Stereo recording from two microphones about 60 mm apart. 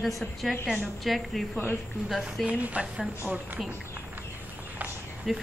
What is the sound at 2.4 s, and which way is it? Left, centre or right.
Speech, right.